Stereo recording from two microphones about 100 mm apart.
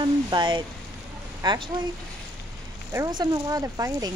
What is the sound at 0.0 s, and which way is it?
Speech, 50° right (ahead or behind).